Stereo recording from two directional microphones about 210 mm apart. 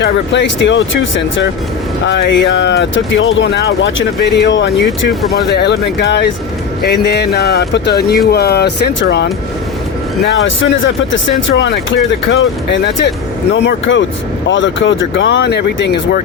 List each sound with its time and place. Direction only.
0.0 s speech: 60° left (ahead or behind)
10.4 s speech: 65° left (ahead or behind)